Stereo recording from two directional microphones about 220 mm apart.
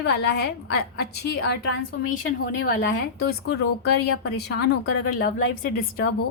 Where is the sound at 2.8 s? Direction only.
45° left (ahead or behind).